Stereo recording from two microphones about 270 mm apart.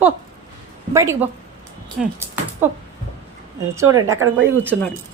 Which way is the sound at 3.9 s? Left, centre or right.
Centre.